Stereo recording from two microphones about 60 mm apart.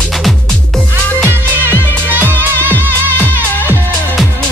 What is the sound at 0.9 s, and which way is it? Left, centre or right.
Music, right.